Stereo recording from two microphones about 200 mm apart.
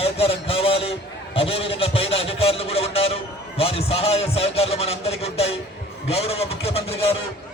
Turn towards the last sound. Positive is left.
turn(degrees=30)  # may be behind; listen again after turning